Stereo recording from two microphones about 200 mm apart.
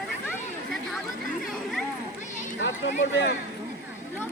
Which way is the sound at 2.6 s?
65° left (ahead or behind).